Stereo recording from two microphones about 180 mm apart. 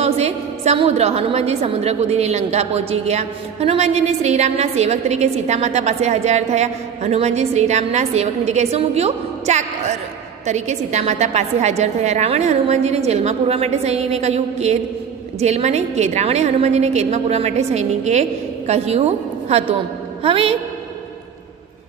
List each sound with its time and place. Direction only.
0.0 s a woman's voice: 35° right (ahead or behind)